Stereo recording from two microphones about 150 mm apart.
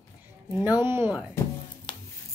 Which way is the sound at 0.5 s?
15° right (ahead or behind).